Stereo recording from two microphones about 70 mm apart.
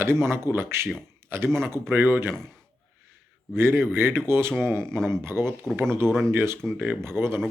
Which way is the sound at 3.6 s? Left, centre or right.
Right.